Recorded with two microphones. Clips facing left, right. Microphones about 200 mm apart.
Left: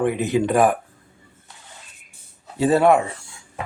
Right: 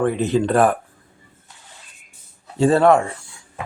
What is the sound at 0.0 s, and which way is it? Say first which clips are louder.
Speech: right 1 dB; 15° left (ahead or behind).